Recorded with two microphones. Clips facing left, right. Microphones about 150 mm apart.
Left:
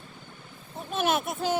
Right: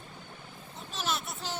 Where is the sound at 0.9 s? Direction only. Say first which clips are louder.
Left 9 dB; 55° left (ahead or behind).